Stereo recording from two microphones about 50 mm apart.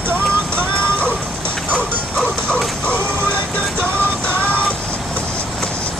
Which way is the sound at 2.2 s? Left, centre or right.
Left.